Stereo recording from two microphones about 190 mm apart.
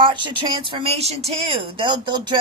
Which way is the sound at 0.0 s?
25° right (ahead or behind).